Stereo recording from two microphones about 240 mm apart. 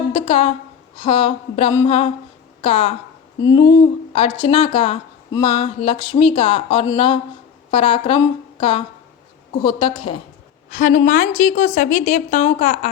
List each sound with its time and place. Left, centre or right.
0.1 s a woman's voice: left
9.6 s speech: centre
10.7 s a woman's voice: left